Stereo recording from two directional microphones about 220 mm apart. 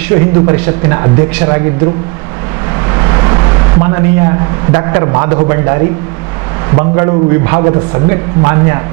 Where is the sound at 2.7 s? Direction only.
20° right (ahead or behind).